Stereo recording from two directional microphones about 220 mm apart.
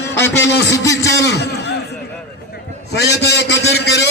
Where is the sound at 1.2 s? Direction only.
50° left (ahead or behind).